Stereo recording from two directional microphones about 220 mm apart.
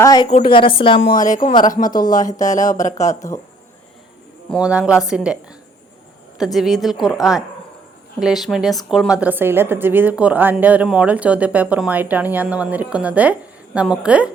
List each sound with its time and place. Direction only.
0.0 s speech: 15° left (ahead or behind)
0.3 s a woman's voice: 30° left (ahead or behind)
0.9 s speech: 40° left (ahead or behind)
1.4 s a woman's voice: 20° left (ahead or behind)
1.7 s speech: 40° left (ahead or behind)
3.1 s speech: 15° left (ahead or behind)
4.4 s a woman's voice: centre (ahead or behind)
6.4 s a woman's voice: centre (ahead or behind)